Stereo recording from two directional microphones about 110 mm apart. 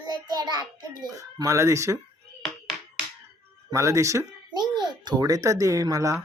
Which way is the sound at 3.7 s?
30° right (ahead or behind).